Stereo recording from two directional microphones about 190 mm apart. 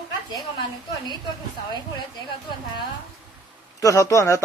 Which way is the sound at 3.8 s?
15° left (ahead or behind).